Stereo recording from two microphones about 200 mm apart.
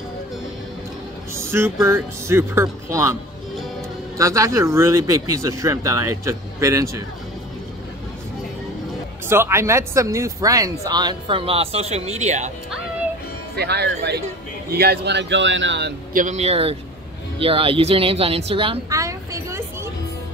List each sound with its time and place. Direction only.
1.3 s speech: 10° right (ahead or behind)
4.2 s speech: 15° right (ahead or behind)
9.3 s speech: 10° right (ahead or behind); by 12.4 s 35° right (ahead or behind)
13.6 s speech: 55° right (ahead or behind)
16.1 s speech: 40° right (ahead or behind)
18.9 s a sound: 15° right (ahead or behind)